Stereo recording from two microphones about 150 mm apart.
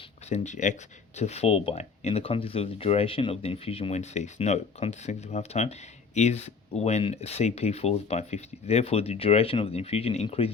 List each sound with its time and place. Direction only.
0.3 s speech: 50° left (ahead or behind)